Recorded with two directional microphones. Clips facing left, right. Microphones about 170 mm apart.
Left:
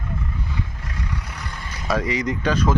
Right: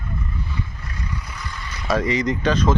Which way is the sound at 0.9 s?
80° left.